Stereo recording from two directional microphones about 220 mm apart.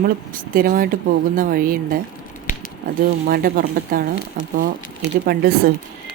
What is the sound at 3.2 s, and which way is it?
Speech, 40° right (ahead or behind).